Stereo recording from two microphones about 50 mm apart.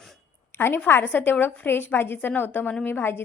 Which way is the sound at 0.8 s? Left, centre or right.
Left.